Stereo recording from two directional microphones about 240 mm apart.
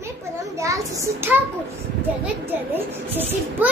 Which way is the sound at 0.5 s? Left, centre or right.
Centre.